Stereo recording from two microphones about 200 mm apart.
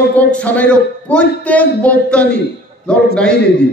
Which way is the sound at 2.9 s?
5° left (ahead or behind).